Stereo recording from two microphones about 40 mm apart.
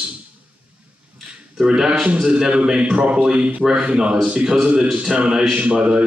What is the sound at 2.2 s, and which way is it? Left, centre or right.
Speech, right.